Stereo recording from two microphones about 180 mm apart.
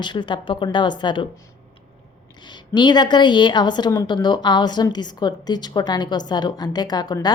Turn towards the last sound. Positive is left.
turn(degrees=25)  # may be behind; listen again after turning